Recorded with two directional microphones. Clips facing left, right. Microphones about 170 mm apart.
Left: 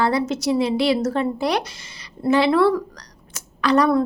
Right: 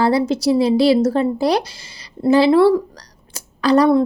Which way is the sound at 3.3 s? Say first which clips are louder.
Right 4 dB; 35° right (ahead or behind).